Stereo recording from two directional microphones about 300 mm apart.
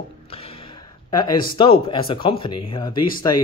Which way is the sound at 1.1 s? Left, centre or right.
Centre.